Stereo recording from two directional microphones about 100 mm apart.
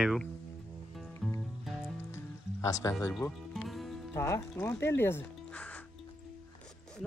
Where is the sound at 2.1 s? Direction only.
30° left (ahead or behind).